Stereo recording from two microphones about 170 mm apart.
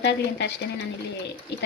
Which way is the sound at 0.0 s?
90° left.